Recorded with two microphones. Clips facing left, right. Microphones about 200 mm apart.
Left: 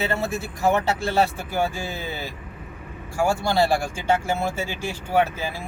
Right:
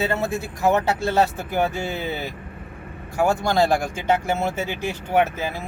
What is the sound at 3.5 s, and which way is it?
Speech, 20° right (ahead or behind).